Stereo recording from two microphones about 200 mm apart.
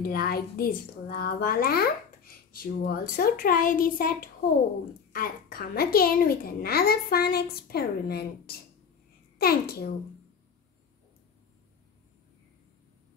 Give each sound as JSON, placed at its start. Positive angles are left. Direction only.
{"t": 0.0, "sound": "speech", "side_deg": 50}